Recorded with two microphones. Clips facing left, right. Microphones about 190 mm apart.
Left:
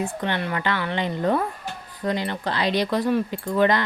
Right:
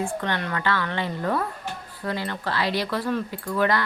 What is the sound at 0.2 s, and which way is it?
A woman's voice, 15° left (ahead or behind).